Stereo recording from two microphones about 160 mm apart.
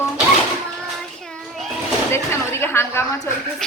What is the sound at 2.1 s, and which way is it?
A woman's voice, 15° left (ahead or behind).